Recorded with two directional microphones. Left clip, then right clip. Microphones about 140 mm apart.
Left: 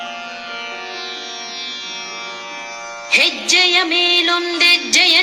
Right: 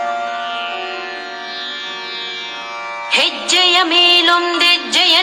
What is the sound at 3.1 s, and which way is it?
Music, 25° left (ahead or behind).